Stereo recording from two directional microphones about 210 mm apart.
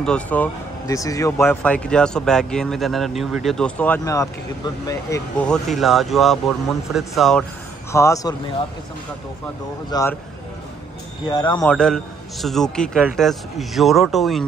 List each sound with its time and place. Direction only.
0.0 s speech: 5° left (ahead or behind)
5.4 s speech: centre (ahead or behind)
7.9 s speech: 15° left (ahead or behind)
9.8 s speech: 15° left (ahead or behind)
11.2 s a man's voice: 20° left (ahead or behind)
11.6 s speech: 5° left (ahead or behind)